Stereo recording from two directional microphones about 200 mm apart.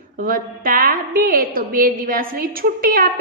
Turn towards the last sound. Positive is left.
turn(degrees=-45)  # may be behind; listen again after turning